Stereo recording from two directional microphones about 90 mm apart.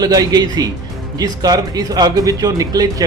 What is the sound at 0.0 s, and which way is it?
Speech, 45° right (ahead or behind).